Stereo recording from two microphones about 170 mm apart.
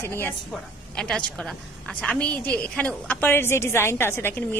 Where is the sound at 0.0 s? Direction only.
15° left (ahead or behind).